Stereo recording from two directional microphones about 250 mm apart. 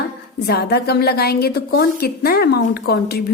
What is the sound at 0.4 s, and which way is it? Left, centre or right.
A woman's voice, left.